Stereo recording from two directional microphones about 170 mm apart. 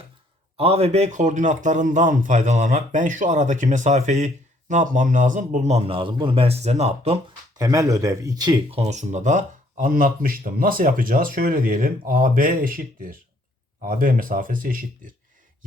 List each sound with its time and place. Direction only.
0.5 s a man's voice: 35° right (ahead or behind)
7.5 s speech: 20° right (ahead or behind)
8.8 s a man's voice: 45° right (ahead or behind)